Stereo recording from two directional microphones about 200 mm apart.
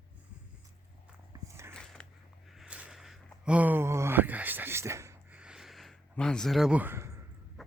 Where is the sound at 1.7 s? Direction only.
5° left (ahead or behind); by 7.1 s 10° right (ahead or behind).